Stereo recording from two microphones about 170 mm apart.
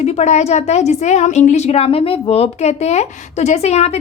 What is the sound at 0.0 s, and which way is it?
A woman's voice, 40° left (ahead or behind).